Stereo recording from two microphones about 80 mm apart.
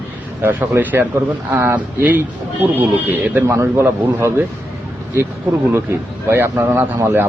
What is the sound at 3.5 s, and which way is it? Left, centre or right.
A man's voice, right.